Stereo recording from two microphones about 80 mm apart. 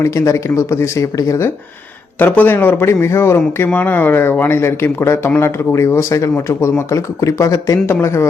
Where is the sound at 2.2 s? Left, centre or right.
Left.